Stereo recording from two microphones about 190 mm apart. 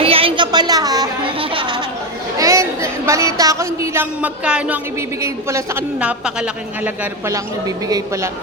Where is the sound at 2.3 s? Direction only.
15° right (ahead or behind).